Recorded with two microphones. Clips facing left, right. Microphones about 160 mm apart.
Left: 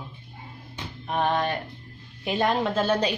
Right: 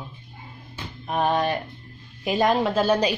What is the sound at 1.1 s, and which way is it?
A woman's voice, 10° right (ahead or behind).